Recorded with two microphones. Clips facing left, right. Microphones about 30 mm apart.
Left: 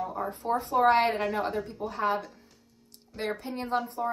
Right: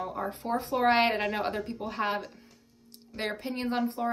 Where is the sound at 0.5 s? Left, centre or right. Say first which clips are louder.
Left 3 dB; right.